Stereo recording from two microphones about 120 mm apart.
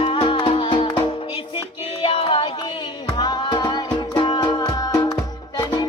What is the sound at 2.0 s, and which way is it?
Music, 45° left (ahead or behind).